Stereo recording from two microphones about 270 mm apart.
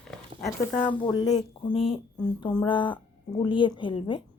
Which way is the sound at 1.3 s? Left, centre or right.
Centre.